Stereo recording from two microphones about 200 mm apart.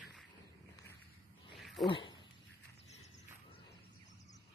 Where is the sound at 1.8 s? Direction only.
25° left (ahead or behind).